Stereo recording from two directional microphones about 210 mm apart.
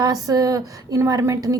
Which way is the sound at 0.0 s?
15° right (ahead or behind).